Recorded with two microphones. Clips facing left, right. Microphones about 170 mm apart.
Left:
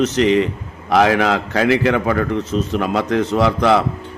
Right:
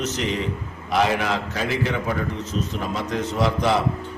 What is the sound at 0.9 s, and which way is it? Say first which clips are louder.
A man's voice: left 7 dB; 90° left.